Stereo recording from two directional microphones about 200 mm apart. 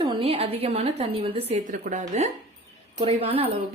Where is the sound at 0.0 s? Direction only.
25° right (ahead or behind).